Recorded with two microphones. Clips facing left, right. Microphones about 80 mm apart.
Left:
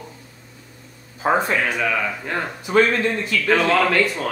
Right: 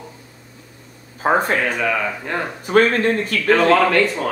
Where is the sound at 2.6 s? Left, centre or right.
Right.